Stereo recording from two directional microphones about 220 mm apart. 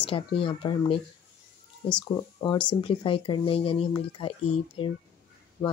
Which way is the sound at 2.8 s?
25° left (ahead or behind).